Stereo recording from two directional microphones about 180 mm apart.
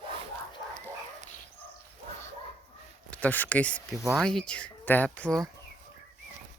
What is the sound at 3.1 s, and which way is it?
Speech, 10° left (ahead or behind).